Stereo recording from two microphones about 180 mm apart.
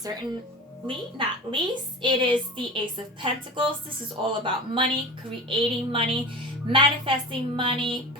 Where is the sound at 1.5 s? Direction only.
25° right (ahead or behind).